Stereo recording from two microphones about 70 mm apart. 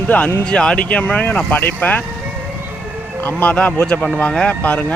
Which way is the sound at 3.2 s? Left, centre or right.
Left.